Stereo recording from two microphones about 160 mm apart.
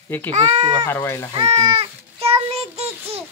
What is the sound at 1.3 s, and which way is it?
Child singing, 40° right (ahead or behind).